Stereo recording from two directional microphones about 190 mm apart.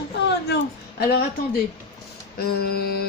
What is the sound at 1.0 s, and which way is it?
Speech, 55° left (ahead or behind).